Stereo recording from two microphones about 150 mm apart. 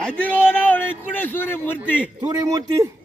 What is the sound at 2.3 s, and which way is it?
Speech, 25° right (ahead or behind).